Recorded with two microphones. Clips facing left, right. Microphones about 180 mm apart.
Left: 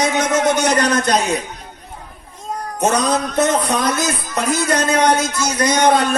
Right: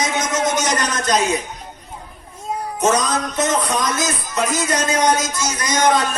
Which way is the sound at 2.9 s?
60° left (ahead or behind).